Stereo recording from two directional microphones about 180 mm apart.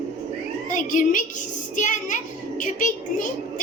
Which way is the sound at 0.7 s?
45° left (ahead or behind).